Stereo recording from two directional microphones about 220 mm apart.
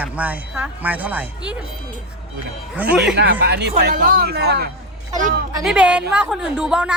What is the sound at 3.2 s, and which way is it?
Speech, 50° right (ahead or behind).